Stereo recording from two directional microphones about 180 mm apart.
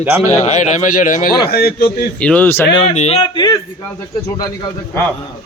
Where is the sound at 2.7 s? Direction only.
35° left (ahead or behind).